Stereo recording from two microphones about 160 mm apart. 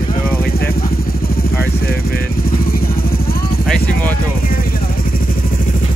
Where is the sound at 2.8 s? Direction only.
65° left (ahead or behind).